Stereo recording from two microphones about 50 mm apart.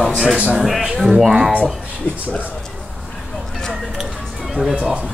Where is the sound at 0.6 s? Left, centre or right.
Centre.